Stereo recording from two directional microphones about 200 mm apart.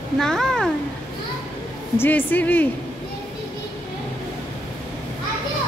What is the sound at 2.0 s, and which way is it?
Speech, 10° left (ahead or behind).